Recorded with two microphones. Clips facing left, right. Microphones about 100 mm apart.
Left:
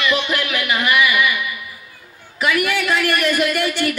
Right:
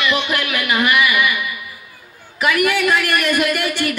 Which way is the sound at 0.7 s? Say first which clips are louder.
Right 2 dB; 60° right (ahead or behind).